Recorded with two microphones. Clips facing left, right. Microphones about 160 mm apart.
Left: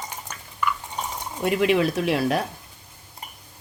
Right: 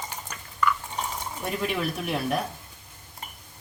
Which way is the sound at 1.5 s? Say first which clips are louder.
Left 9 dB; 80° left.